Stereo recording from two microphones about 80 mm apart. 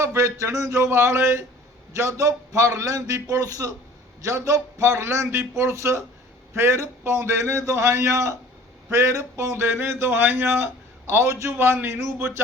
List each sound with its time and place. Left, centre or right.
0.0 s a man's voice: right